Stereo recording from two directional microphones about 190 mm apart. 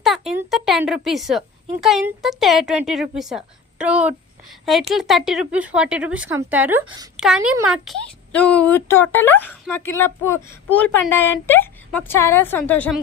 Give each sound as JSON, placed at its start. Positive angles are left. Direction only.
{"t": 0.0, "sound": "a sound", "side_deg": 0}
{"t": 0.5, "sound": "a woman's voice", "side_deg": 0}
{"t": 6.8, "sound": "speech", "side_deg": -20}
{"t": 7.2, "sound": "a woman's voice", "side_deg": -5}